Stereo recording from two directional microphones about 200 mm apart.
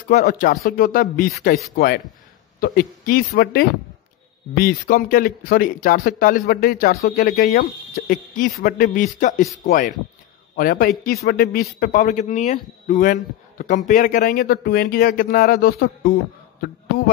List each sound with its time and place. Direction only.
0.1 s speech: 40° left (ahead or behind)
2.6 s a man's voice: 45° left (ahead or behind)